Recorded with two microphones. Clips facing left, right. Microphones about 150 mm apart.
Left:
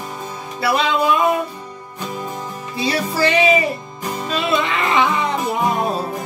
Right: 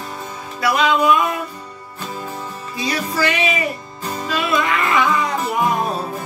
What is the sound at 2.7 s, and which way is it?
Music, 30° left (ahead or behind).